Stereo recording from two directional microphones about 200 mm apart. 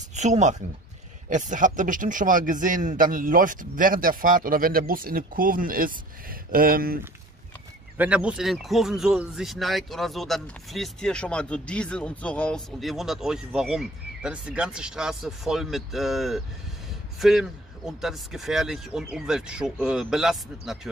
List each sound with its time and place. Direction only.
0.1 s a man's voice: 35° right (ahead or behind)
8.0 s speech: 5° right (ahead or behind)